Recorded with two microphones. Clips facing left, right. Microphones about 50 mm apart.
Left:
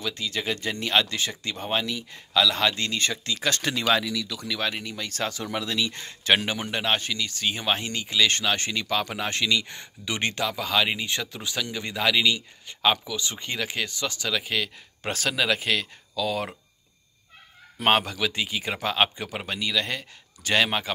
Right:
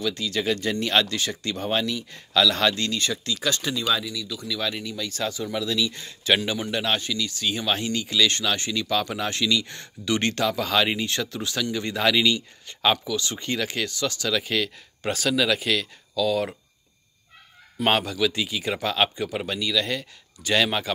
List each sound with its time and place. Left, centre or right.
0.0 s a man's voice: left
2.7 s speech: left
3.0 s speech: left
3.5 s speech: left
3.8 s speech: left
4.6 s speech: left; by 11.1 s centre
11.1 s a man's voice: centre
13.0 s speech: left
14.3 s a man's voice: centre
15.0 s speech: left
17.8 s speech: left